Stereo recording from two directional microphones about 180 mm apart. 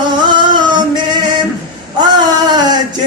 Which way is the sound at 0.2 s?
25° right (ahead or behind).